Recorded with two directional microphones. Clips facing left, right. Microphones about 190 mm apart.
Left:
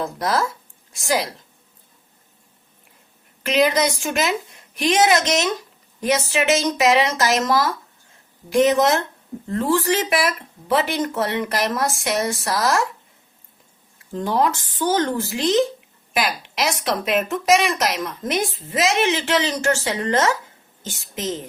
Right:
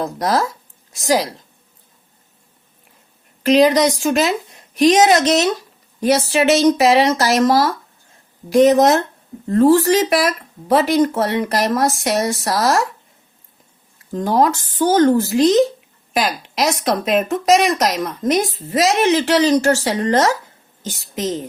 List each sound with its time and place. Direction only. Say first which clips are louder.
0.0 s speech: right 3 dB; 40° right (ahead or behind)
3.4 s speech: right 6 dB; 35° right (ahead or behind)
14.1 s a woman's voice: right 4 dB; 40° right (ahead or behind)